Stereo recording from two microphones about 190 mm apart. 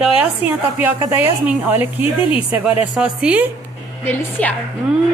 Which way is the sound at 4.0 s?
10° left (ahead or behind).